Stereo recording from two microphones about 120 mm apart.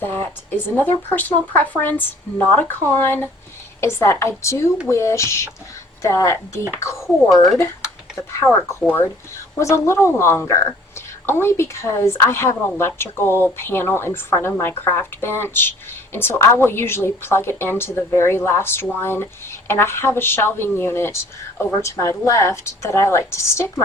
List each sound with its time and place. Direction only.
0.0 s a woman's voice: 15° left (ahead or behind)
8.8 s speech: centre (ahead or behind)
9.6 s a woman's voice: 25° left (ahead or behind)